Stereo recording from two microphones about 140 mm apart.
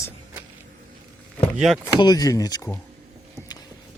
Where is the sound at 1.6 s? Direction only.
5° right (ahead or behind).